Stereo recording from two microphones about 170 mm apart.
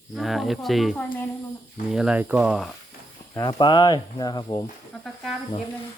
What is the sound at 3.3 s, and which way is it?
Speech, 25° left (ahead or behind).